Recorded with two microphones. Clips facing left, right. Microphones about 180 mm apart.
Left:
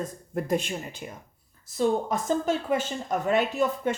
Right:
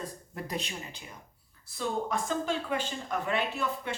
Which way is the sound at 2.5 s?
45° left (ahead or behind).